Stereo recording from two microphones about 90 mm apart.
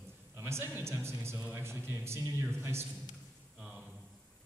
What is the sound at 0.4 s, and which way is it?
A man's voice, 25° right (ahead or behind).